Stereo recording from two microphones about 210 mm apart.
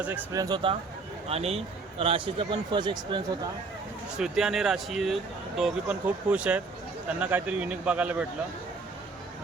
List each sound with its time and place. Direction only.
0.0 s a man's voice: 15° right (ahead or behind)
4.2 s a man's voice: 5° right (ahead or behind)